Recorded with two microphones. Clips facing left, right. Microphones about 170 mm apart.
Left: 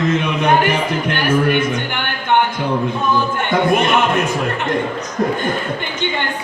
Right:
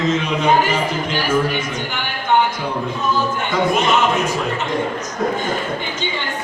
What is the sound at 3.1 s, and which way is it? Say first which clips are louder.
A man's voice: left 2 dB; 60° left (ahead or behind).